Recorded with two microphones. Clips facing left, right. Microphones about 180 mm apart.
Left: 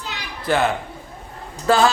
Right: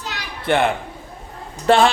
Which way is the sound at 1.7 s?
30° right (ahead or behind).